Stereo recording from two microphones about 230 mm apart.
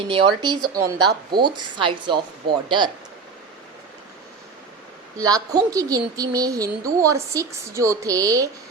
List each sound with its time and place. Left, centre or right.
0.1 s speech: right
5.1 s a woman's voice: centre